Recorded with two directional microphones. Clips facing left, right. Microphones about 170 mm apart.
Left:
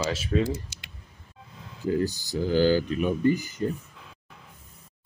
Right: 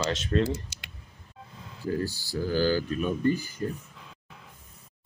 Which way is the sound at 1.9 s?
20° left (ahead or behind).